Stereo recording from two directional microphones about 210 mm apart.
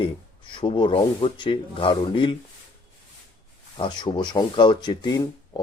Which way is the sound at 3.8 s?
20° left (ahead or behind).